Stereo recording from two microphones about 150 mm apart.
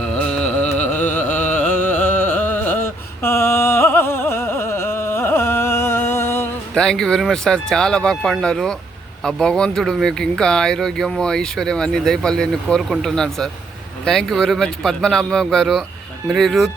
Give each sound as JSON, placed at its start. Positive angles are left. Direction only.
{"t": 0.0, "sound": "carnatic music", "side_deg": 5}
{"t": 3.2, "sound": "music", "side_deg": 15}
{"t": 6.7, "sound": "speech", "side_deg": 5}